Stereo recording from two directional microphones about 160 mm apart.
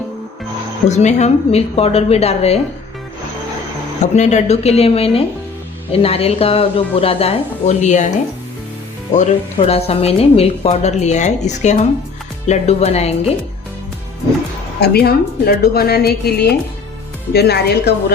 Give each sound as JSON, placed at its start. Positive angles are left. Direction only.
{"t": 0.9, "sound": "a woman's voice", "side_deg": 45}
{"t": 4.0, "sound": "a woman's voice", "side_deg": 45}
{"t": 9.6, "sound": "a woman's voice", "side_deg": 40}
{"t": 14.8, "sound": "a woman's voice", "side_deg": 80}